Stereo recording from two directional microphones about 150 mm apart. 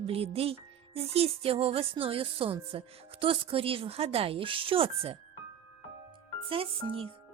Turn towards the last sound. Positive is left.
turn(degrees=-40)  # may be behind; listen again after turning